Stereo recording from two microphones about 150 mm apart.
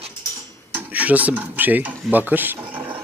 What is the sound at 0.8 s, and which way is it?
Speech, 10° right (ahead or behind).